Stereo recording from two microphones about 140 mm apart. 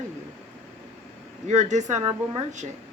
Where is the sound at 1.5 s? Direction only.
55° right (ahead or behind).